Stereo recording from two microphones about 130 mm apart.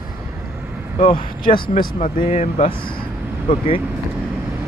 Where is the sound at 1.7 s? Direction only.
90° left; by 2.6 s 60° left (ahead or behind).